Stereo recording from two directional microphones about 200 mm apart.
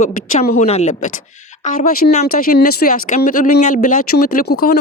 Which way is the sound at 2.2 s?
50° left (ahead or behind).